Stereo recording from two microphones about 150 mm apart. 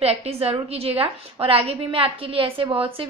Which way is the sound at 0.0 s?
45° right (ahead or behind).